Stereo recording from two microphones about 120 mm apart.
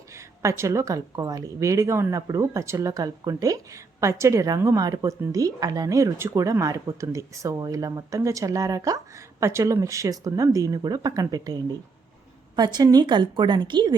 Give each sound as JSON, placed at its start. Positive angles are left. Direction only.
{"t": 0.1, "sound": "a woman's voice", "side_deg": -25}
{"t": 12.5, "sound": "a woman's voice", "side_deg": -35}